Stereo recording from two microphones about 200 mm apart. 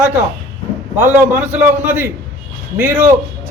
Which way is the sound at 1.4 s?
35° right (ahead or behind).